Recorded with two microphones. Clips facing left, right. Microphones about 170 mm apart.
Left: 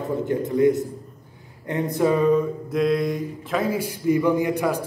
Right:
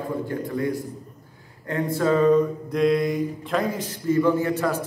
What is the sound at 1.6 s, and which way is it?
Mantra, 20° left (ahead or behind).